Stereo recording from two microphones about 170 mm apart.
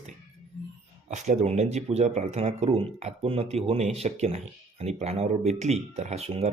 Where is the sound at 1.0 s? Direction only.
45° right (ahead or behind).